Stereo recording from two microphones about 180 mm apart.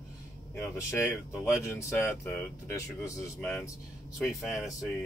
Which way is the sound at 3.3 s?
10° left (ahead or behind).